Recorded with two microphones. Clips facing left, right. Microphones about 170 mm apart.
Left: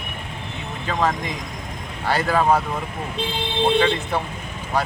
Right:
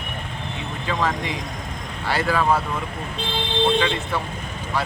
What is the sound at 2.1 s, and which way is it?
Speech, 45° left (ahead or behind).